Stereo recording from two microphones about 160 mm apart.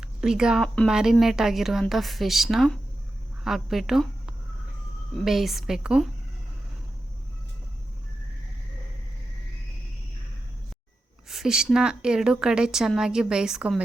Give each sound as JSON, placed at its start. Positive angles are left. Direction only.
{"t": 0.0, "sound": "a woman's voice", "side_deg": -5}
{"t": 11.3, "sound": "a woman's voice", "side_deg": -5}